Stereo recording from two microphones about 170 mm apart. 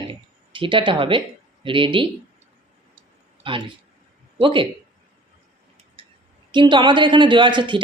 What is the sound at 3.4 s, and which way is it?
Speech, 30° right (ahead or behind).